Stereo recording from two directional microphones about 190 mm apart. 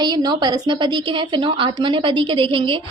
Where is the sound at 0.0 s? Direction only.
20° right (ahead or behind).